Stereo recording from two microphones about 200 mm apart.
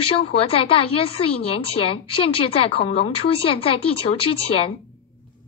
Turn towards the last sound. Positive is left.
turn(degrees=25)  # may be behind; listen again after turning